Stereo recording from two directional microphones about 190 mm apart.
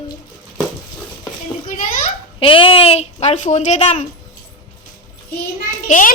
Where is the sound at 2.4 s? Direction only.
30° left (ahead or behind).